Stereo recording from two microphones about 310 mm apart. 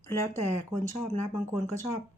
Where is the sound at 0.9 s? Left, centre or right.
Left.